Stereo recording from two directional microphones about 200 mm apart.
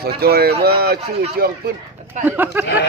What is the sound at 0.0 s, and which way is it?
Speech, 50° right (ahead or behind).